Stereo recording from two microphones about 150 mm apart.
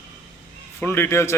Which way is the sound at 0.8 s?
15° left (ahead or behind).